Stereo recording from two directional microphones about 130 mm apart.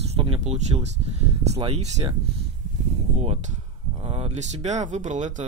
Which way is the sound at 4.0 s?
50° right (ahead or behind).